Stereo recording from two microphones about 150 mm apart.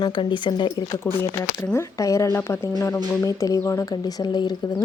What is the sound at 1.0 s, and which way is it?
Speech, 15° left (ahead or behind).